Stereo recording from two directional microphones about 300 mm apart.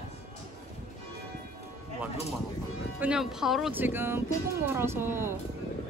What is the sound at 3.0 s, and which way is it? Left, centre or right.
Speech, centre.